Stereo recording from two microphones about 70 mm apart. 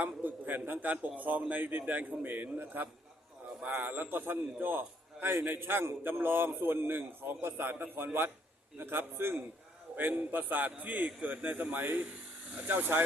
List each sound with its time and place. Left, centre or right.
0.0 s a man's voice: right